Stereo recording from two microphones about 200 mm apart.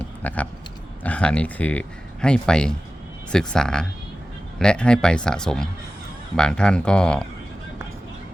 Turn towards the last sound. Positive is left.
turn(degrees=5)  # may be behind; listen again after turning